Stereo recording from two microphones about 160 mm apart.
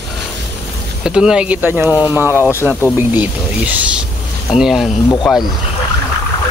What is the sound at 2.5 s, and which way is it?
Speech, 15° left (ahead or behind).